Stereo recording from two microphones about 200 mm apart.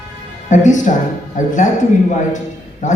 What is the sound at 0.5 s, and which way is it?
Speech, 40° left (ahead or behind).